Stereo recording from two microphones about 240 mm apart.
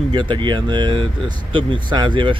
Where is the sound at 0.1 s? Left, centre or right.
Centre.